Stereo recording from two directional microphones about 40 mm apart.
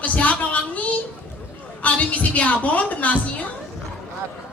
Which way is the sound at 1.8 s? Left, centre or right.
Left.